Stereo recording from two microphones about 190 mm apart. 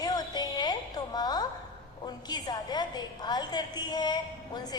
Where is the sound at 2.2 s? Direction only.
20° left (ahead or behind).